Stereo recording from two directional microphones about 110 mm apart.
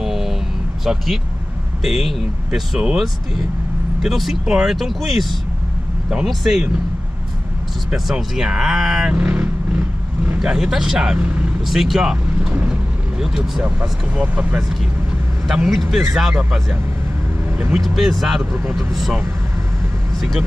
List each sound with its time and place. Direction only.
0.0 s vehicle: 5° right (ahead or behind)
0.8 s speech: centre (ahead or behind)
7.9 s speech: 5° right (ahead or behind)
11.6 s speech: centre (ahead or behind)
17.5 s vehicle: 15° right (ahead or behind)
17.7 s speech: centre (ahead or behind)
18.4 s speech: 20° right (ahead or behind)
18.8 s speech: centre (ahead or behind)